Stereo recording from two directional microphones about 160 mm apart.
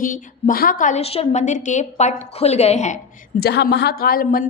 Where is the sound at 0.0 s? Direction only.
60° left (ahead or behind).